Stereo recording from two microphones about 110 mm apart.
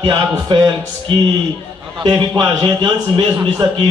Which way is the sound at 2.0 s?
40° right (ahead or behind).